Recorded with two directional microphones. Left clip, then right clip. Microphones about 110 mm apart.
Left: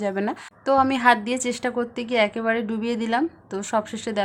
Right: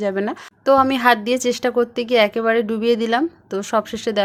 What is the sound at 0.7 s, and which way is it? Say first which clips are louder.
Speech: right 4 dB; 35° right (ahead or behind).